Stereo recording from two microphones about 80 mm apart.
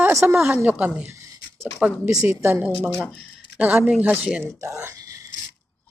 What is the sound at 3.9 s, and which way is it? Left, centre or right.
Speech, centre.